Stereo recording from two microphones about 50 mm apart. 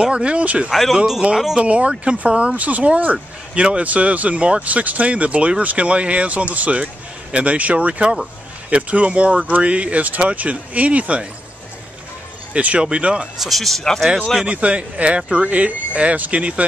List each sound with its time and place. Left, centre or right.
0.0 s speech: right
0.7 s speech: centre
0.9 s a man's voice: centre
1.6 s speech: right
12.5 s speech: right
13.4 s speech: centre
14.4 s speech: right